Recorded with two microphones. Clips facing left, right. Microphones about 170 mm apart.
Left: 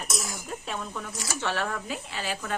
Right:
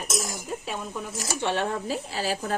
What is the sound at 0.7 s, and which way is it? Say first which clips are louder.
Speech: left 1 dB; 15° right (ahead or behind).